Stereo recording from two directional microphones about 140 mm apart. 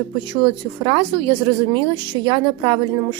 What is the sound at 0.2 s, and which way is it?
Speech, 35° right (ahead or behind).